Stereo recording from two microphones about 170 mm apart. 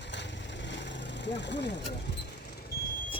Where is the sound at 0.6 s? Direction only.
90° left.